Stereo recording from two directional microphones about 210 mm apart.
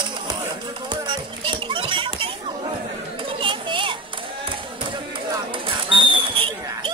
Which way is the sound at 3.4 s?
25° right (ahead or behind).